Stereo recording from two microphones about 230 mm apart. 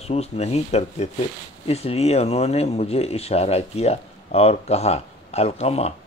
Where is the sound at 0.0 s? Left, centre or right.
Left.